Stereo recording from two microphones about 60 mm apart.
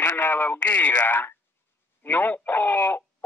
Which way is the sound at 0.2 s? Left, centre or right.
Left.